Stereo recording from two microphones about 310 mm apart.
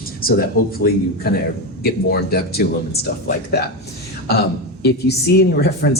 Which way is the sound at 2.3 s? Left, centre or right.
Left.